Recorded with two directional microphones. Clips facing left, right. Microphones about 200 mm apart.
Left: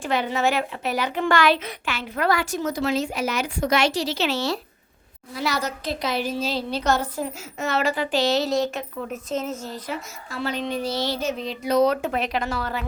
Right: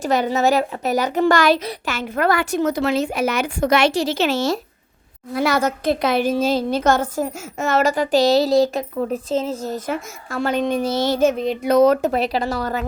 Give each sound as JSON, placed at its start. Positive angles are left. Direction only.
{"t": 0.0, "sound": "a woman's voice", "side_deg": -40}
{"t": 9.6, "sound": "a woman's voice", "side_deg": -45}